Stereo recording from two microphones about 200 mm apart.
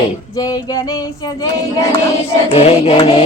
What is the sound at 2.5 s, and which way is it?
Speech, 30° left (ahead or behind).